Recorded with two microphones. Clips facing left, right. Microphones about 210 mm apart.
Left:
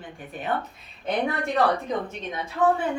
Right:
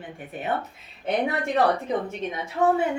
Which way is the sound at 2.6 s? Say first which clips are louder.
Even; 25° right (ahead or behind).